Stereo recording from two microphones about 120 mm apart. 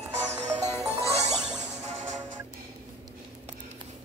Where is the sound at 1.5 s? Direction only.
70° right (ahead or behind).